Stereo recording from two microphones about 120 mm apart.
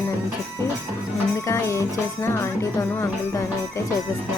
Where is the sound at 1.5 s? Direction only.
25° left (ahead or behind).